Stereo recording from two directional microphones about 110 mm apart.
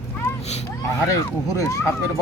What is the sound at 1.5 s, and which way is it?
Speech, 25° left (ahead or behind).